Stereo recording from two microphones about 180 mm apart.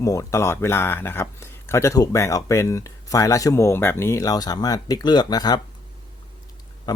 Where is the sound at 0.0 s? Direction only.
15° left (ahead or behind).